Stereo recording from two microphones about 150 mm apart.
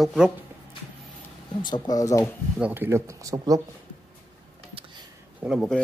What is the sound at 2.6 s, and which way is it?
Speech, 15° right (ahead or behind).